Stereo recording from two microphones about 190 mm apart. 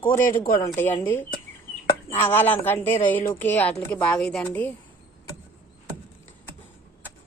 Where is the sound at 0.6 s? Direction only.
15° left (ahead or behind).